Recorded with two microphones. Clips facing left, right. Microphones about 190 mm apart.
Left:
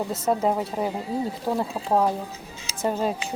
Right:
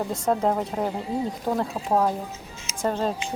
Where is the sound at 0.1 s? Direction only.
5° left (ahead or behind).